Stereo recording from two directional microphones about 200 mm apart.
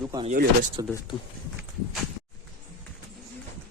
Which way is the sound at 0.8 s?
20° right (ahead or behind).